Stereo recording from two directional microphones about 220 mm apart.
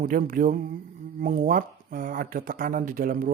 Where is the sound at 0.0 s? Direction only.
35° right (ahead or behind).